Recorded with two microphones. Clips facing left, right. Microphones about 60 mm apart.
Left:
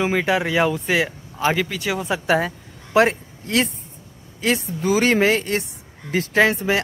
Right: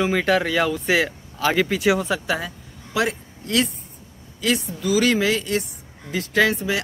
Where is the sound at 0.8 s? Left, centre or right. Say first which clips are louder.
Right 1 dB; centre.